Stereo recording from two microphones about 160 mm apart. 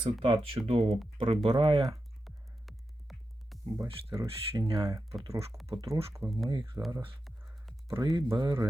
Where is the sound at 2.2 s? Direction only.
Centre (ahead or behind).